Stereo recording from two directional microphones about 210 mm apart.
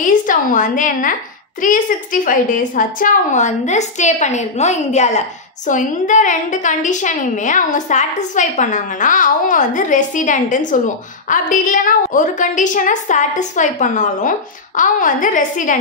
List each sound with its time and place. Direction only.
0.0 s a woman's voice: 40° left (ahead or behind)